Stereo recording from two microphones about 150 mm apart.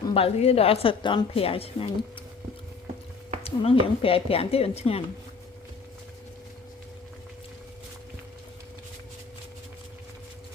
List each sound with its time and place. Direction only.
0.1 s a woman's voice: 40° left (ahead or behind)
3.4 s a woman's voice: 40° left (ahead or behind)